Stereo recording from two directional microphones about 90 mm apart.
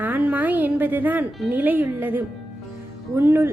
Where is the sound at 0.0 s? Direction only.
20° right (ahead or behind).